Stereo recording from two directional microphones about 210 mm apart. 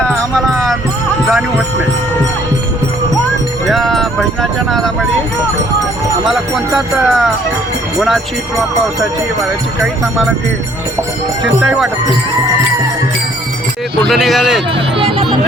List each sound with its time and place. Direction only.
0.3 s music: centre (ahead or behind)
3.7 s a sound: centre (ahead or behind)
6.2 s speech: centre (ahead or behind)
14.1 s speech: centre (ahead or behind)
14.9 s music: 25° right (ahead or behind)